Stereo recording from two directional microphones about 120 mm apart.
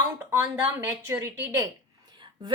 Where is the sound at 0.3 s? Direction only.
20° right (ahead or behind).